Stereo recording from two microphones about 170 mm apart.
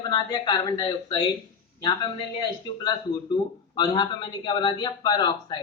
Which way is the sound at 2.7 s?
30° left (ahead or behind).